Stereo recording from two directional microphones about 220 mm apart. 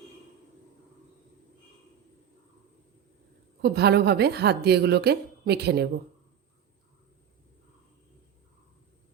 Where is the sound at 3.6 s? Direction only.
50° right (ahead or behind).